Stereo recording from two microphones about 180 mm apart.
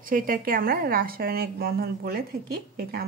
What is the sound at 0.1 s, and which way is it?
A woman's voice, 50° right (ahead or behind).